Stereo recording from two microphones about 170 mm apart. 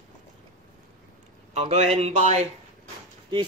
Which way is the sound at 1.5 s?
45° right (ahead or behind).